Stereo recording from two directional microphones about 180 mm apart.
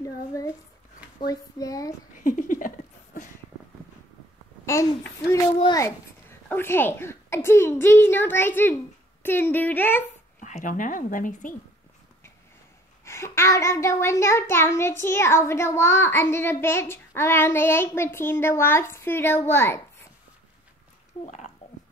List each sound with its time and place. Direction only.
0.0 s a sound: 20° left (ahead or behind)
1.2 s a child's voice: 20° left (ahead or behind)
2.1 s a sound: 45° left (ahead or behind)
4.6 s a child's voice: 15° left (ahead or behind)
6.5 s a child's voice: 10° left (ahead or behind)
10.4 s speech: 45° left (ahead or behind)
13.0 s a child's voice: 15° left (ahead or behind)
21.2 s speech: 40° left (ahead or behind)